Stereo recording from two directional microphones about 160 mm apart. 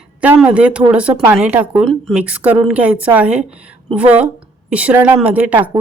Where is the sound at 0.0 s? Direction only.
5° right (ahead or behind).